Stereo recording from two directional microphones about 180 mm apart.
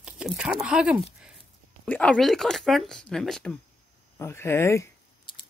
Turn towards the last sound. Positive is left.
turn(degrees=15)  # may be behind; listen again after turning